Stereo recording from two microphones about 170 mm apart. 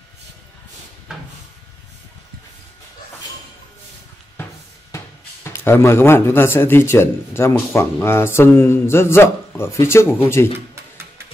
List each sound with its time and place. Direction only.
4.9 s speech: 15° left (ahead or behind)